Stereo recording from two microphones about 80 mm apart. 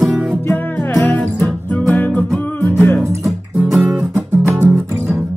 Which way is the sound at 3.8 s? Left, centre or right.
Centre.